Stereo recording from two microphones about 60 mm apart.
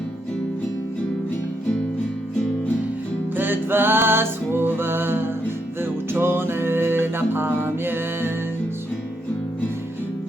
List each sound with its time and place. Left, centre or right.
3.3 s music: right